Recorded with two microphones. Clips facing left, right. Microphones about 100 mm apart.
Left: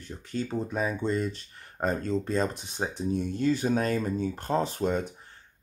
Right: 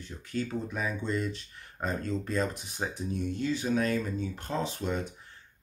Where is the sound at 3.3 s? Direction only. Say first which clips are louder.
Left 3 dB; 45° left (ahead or behind).